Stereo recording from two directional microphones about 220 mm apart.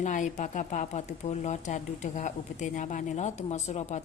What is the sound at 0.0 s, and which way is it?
Speech, 35° left (ahead or behind).